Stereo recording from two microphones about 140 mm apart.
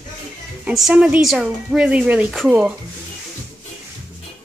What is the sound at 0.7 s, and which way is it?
Speech, 5° right (ahead or behind).